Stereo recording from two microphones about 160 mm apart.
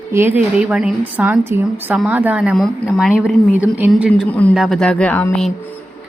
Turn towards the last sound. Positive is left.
turn(degrees=5)  # may be behind; listen again after turning